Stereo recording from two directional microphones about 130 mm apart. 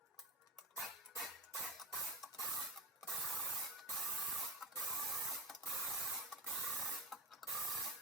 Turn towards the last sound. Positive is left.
turn(degrees=0)  # may be behind; listen again after turning